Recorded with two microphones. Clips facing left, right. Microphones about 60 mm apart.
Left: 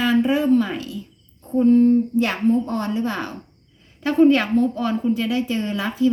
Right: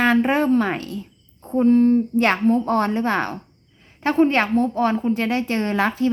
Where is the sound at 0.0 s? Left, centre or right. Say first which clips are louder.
Right 1 dB; right.